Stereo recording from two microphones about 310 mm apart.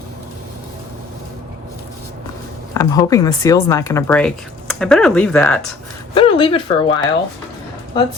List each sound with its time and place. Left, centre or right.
2.7 s speech: centre
6.1 s speech: centre